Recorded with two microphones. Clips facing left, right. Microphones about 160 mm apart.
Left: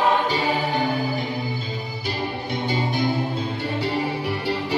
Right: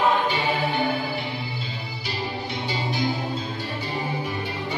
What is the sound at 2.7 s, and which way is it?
Music, 55° left (ahead or behind).